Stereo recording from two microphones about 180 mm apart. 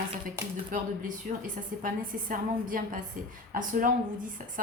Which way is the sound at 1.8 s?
50° right (ahead or behind).